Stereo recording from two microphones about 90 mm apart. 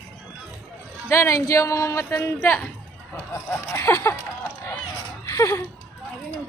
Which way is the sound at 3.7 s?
25° left (ahead or behind).